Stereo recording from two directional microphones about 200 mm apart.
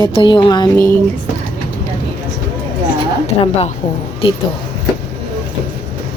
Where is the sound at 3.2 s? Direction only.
30° left (ahead or behind).